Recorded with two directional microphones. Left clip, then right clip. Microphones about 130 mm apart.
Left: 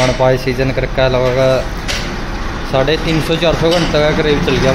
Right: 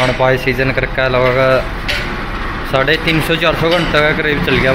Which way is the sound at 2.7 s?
15° left (ahead or behind).